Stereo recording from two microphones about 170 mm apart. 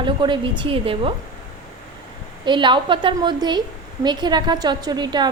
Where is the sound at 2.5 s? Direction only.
30° right (ahead or behind).